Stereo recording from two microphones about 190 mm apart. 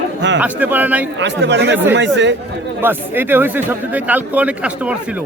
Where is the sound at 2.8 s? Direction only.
10° right (ahead or behind).